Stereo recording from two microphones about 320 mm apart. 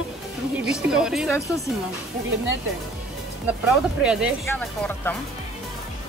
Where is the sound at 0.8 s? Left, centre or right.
Centre.